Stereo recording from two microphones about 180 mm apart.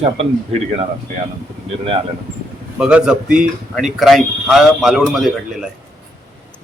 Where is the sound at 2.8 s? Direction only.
5° right (ahead or behind).